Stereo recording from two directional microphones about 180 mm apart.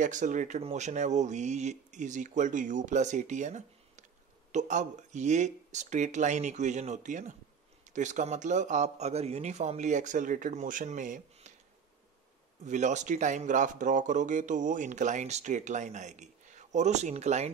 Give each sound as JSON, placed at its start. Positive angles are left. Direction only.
{"t": 0.0, "sound": "speech", "side_deg": -45}
{"t": 12.6, "sound": "speech", "side_deg": -40}